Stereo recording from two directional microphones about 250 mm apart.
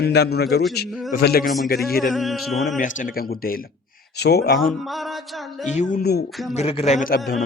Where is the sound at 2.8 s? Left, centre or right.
Left.